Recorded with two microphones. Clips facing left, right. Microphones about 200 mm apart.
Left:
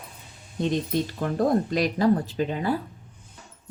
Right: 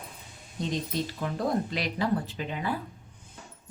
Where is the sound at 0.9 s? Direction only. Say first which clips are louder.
Left 6 dB; 50° left (ahead or behind).